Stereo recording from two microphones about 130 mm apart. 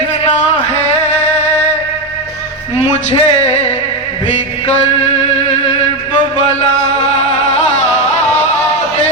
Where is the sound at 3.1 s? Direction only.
55° left (ahead or behind).